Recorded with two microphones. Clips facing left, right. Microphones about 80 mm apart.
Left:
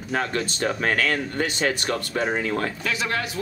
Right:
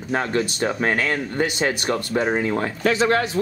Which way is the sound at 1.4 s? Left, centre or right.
Right.